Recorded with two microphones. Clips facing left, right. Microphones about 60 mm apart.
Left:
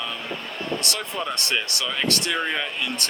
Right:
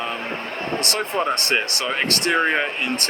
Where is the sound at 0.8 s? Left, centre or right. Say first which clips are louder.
Right 6 dB; right.